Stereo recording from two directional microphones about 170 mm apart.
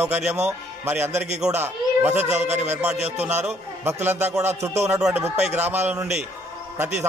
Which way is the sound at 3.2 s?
10° right (ahead or behind).